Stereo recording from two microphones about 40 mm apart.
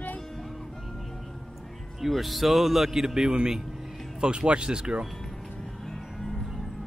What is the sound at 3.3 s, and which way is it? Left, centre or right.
Speech, right.